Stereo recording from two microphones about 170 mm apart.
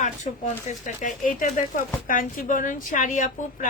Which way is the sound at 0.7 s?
50° left (ahead or behind).